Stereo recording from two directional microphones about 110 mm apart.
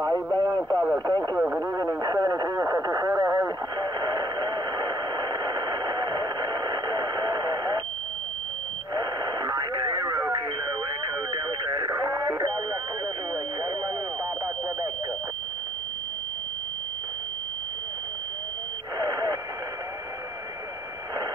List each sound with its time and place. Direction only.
0.0 s speech: 30° right (ahead or behind)
1.4 s radio: 30° right (ahead or behind)
8.9 s radio: 35° right (ahead or behind)
11.6 s radio: 30° right (ahead or behind)
18.9 s radio: 35° right (ahead or behind)